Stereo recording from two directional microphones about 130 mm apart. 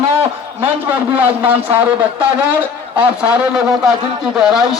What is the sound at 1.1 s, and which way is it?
Speech, 10° right (ahead or behind).